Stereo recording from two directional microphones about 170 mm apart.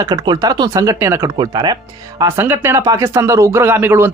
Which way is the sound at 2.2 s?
15° right (ahead or behind).